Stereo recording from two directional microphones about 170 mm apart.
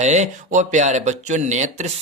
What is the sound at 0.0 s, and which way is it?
Speech, 45° right (ahead or behind).